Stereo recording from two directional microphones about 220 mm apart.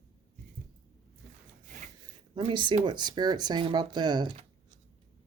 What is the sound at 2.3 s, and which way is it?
Speech, 20° right (ahead or behind).